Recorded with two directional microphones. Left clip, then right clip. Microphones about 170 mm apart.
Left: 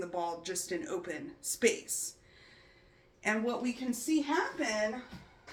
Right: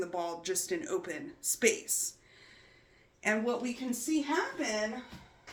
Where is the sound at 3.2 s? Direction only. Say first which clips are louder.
Right 2 dB; 30° right (ahead or behind).